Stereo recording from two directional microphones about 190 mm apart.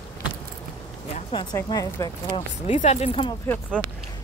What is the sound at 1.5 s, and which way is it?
Speech, 20° left (ahead or behind).